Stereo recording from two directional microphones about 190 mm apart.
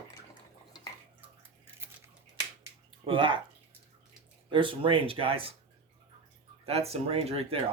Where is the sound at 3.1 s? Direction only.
25° right (ahead or behind).